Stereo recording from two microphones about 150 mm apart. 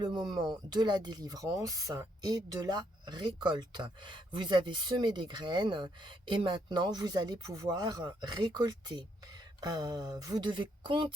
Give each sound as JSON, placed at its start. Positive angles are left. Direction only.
{"t": 0.0, "sound": "speech", "side_deg": -30}